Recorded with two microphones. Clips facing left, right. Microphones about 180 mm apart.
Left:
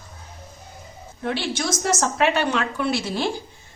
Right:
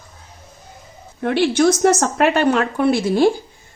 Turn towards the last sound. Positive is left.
turn(degrees=-50)  # may be behind; listen again after turning